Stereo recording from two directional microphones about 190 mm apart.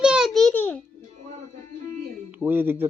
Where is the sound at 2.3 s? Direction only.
10° right (ahead or behind).